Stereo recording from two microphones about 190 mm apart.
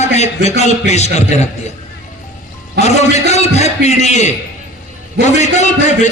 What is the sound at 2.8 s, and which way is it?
A man's voice, 35° left (ahead or behind).